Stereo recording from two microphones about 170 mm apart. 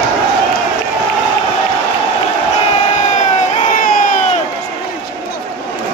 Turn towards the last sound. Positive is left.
turn(degrees=55)  # may be behind; listen again after turning